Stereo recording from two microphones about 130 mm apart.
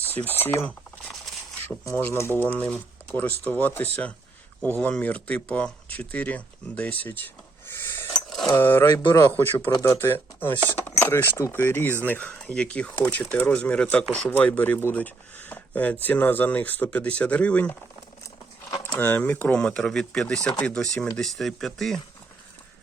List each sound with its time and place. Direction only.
0.3 s speech: 15° left (ahead or behind)
1.8 s speech: 20° left (ahead or behind)
7.7 s a sound: 20° left (ahead or behind)
8.1 s a sound: centre (ahead or behind)
8.5 s speech: 15° left (ahead or behind)
8.9 s a man's voice: 35° left (ahead or behind)
9.3 s speech: 15° left (ahead or behind)
18.9 s speech: 10° left (ahead or behind)